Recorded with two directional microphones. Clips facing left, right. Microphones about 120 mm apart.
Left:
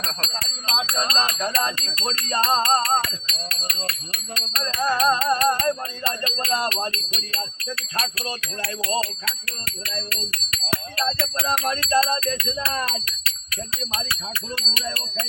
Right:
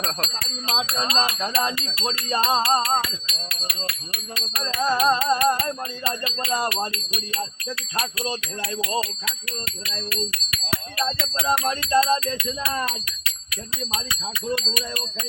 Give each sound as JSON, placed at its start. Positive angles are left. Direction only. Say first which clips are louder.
{"t": 0.0, "sound": "speech", "louder": "right 2 dB", "side_deg": -5}
{"t": 1.0, "sound": "music", "louder": "even", "side_deg": -10}